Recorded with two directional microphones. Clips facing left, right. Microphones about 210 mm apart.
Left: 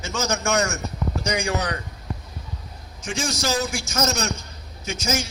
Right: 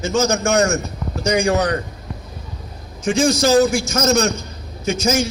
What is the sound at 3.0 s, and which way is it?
A man's voice, 55° right (ahead or behind).